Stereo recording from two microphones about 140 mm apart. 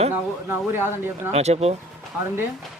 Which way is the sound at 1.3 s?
50° right (ahead or behind).